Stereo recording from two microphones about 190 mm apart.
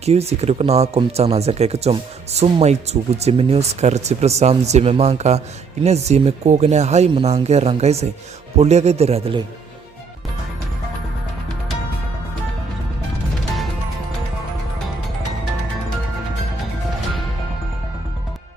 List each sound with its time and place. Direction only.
0.0 s speech: 35° right (ahead or behind)